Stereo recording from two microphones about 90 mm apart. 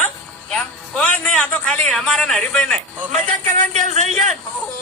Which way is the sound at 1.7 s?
5° left (ahead or behind).